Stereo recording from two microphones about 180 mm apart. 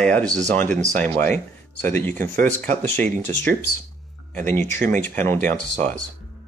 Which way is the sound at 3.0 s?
45° right (ahead or behind).